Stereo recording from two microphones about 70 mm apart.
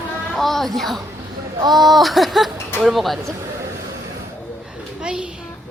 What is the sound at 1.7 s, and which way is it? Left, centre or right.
Speech, centre.